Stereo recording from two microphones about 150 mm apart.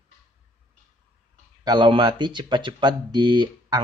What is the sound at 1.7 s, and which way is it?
A man's voice, 30° right (ahead or behind).